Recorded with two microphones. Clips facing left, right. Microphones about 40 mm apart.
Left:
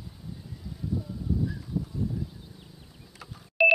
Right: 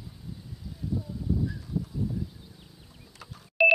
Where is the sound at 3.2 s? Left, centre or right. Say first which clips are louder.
Even; centre.